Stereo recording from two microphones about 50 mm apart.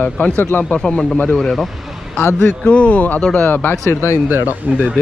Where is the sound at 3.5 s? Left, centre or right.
Left.